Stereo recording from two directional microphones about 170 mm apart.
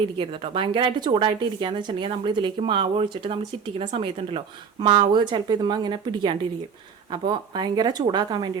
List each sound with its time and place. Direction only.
0.2 s a woman's voice: 30° right (ahead or behind)